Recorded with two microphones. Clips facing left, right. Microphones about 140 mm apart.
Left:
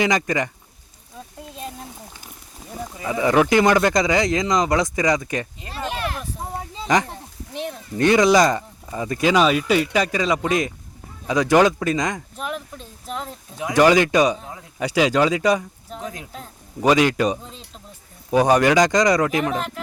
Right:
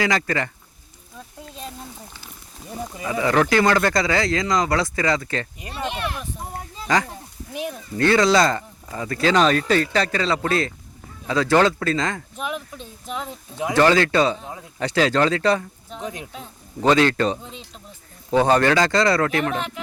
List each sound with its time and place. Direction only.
0.0 s speech: 15° left (ahead or behind)
1.4 s a sound: 5° left (ahead or behind)
3.0 s speech: 20° left (ahead or behind)
6.4 s a sound: 25° left (ahead or behind)
7.9 s speech: 15° left (ahead or behind)
12.4 s speech: centre (ahead or behind)
13.7 s speech: 15° left (ahead or behind)
16.0 s speech: 25° right (ahead or behind)
16.8 s speech: 10° left (ahead or behind)